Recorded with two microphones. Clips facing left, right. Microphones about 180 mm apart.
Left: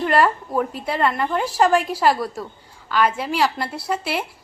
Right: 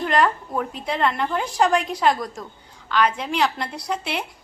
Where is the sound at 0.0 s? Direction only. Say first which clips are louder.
Left 2 dB; 5° left (ahead or behind).